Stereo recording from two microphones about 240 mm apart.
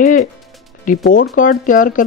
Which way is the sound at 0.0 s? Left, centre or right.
Left.